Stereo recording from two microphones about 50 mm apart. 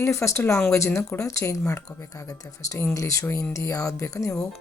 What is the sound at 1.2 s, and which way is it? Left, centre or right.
Speech, left.